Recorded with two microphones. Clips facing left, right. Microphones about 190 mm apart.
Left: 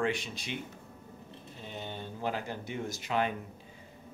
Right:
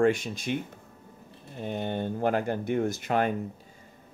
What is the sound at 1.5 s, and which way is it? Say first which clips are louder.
Speech: right 11 dB; 55° right (ahead or behind).